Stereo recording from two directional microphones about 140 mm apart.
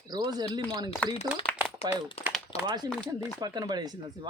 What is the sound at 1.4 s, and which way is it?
Crumpling, 40° left (ahead or behind).